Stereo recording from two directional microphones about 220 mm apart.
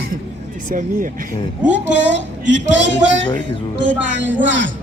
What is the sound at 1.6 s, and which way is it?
A woman's voice, 55° right (ahead or behind).